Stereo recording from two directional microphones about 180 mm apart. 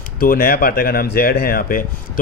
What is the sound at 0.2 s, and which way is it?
Speech, 55° left (ahead or behind).